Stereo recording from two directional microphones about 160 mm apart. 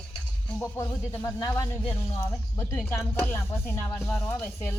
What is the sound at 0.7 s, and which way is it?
Speech, 20° left (ahead or behind).